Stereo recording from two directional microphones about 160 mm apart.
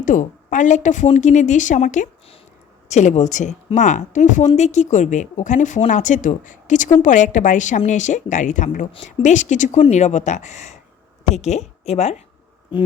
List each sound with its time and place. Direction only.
0.0 s a woman's voice: 55° left (ahead or behind)